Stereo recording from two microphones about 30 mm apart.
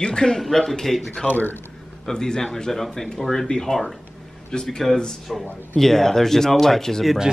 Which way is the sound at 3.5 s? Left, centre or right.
Left.